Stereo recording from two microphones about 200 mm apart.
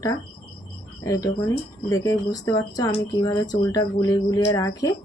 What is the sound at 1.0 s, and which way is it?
Speech, 15° left (ahead or behind).